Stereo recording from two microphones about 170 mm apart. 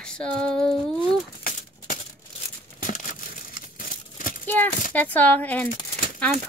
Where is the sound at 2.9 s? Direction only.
50° left (ahead or behind).